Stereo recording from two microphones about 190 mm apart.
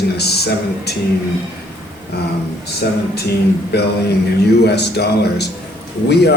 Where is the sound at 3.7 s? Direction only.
60° left (ahead or behind).